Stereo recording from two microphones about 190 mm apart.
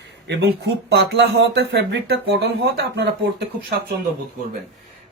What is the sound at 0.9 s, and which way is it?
Speech, 65° right (ahead or behind).